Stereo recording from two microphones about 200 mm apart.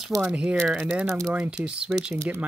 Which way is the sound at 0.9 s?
10° right (ahead or behind).